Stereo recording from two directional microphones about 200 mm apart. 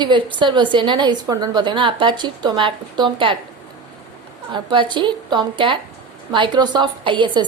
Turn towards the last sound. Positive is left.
turn(degrees=-25)  # may be behind; listen again after turning